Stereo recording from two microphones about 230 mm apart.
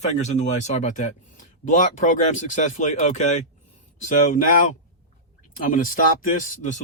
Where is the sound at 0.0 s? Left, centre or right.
Left.